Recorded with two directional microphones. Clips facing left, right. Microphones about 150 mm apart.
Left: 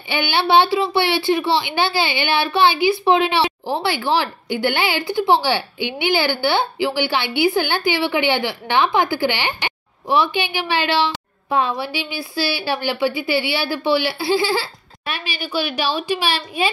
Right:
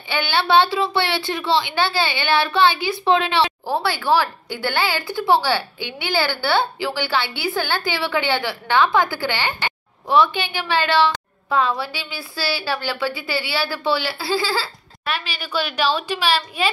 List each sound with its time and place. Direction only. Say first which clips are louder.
0.1 s a woman's voice: left 1 dB; 15° left (ahead or behind)